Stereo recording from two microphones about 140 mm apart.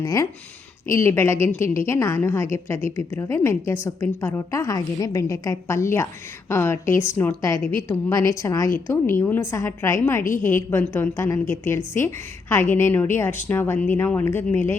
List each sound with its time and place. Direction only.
0.0 s a woman's voice: 25° left (ahead or behind)